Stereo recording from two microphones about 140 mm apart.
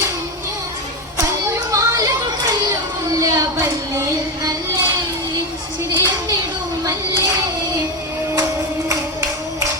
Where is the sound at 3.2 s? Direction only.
20° right (ahead or behind).